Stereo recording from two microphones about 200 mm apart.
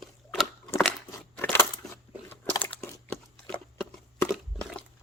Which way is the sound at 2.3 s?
10° left (ahead or behind).